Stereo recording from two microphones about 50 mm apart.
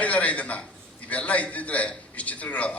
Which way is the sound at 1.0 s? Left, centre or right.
Left.